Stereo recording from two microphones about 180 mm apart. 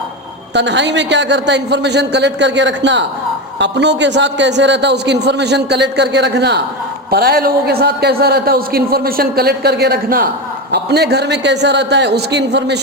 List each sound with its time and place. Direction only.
0.5 s a man's voice: 75° right (ahead or behind)
7.1 s a man's voice: 60° right (ahead or behind)